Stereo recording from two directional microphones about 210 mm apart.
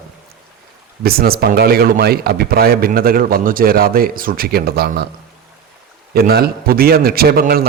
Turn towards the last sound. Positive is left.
turn(degrees=-45)  # may be behind; listen again after turning